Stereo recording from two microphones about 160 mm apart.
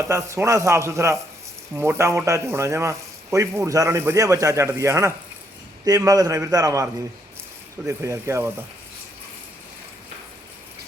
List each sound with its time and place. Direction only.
0.1 s a man's voice: 15° right (ahead or behind)